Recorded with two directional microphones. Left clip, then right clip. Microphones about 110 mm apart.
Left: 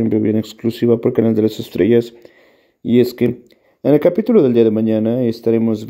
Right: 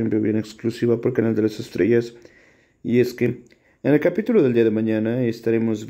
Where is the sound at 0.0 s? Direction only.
45° left (ahead or behind).